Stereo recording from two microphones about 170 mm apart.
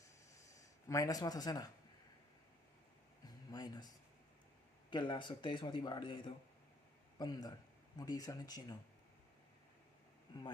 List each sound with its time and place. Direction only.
0.9 s speech: 20° left (ahead or behind)
3.2 s a sound: 25° left (ahead or behind)
4.9 s speech: 25° left (ahead or behind)